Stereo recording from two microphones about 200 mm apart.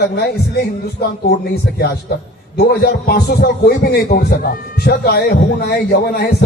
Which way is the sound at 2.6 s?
50° left (ahead or behind).